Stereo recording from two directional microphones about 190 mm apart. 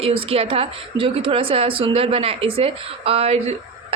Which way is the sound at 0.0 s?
30° right (ahead or behind).